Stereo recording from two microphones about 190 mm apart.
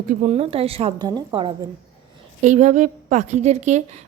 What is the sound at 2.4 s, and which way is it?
Speech, 40° right (ahead or behind).